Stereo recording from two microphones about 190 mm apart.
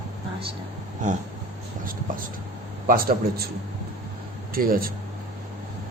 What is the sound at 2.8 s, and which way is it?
Speech, 50° right (ahead or behind).